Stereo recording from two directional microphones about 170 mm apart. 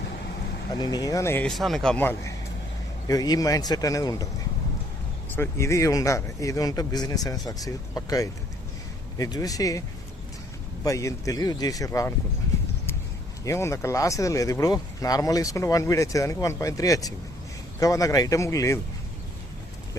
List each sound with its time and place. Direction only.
0.8 s speech: 25° left (ahead or behind)
5.3 s speech: 15° left (ahead or behind)
10.8 s speech: 20° left (ahead or behind)
13.4 s speech: 15° left (ahead or behind)